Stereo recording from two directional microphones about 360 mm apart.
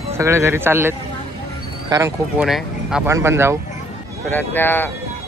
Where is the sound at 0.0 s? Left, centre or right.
Centre.